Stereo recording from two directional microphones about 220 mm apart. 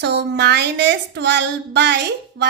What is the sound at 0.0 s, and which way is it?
A woman's voice, 50° right (ahead or behind).